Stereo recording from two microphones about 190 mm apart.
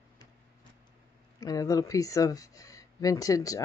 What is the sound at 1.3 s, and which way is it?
Speech, 20° left (ahead or behind).